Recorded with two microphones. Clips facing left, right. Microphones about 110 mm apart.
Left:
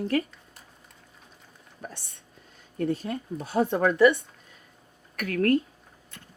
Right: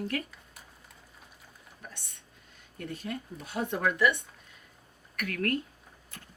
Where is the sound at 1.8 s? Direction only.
35° left (ahead or behind).